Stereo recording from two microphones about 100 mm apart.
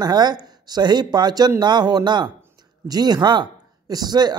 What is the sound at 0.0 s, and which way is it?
Speech, 45° right (ahead or behind).